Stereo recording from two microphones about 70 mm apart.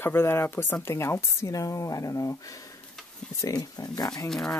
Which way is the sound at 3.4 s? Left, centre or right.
Left.